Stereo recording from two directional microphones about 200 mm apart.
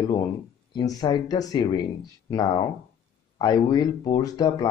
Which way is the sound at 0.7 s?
20° left (ahead or behind).